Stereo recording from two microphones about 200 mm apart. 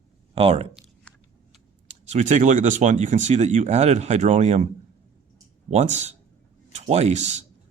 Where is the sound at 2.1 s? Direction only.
35° right (ahead or behind).